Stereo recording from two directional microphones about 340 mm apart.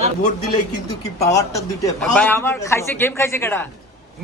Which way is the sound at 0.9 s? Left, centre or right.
Centre.